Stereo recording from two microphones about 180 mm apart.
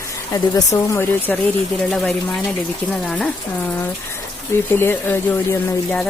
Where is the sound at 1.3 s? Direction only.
5° left (ahead or behind).